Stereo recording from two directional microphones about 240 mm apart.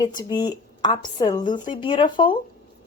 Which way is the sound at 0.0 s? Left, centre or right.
Centre.